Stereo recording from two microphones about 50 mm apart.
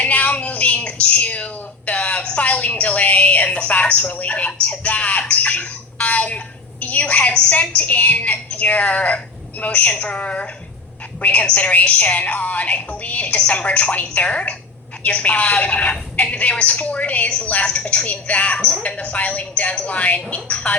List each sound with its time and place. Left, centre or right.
0.0 s a sound: left
2.2 s music: left
4.6 s a woman's voice: left